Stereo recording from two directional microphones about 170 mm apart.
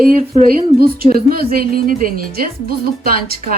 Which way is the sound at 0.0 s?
60° right (ahead or behind).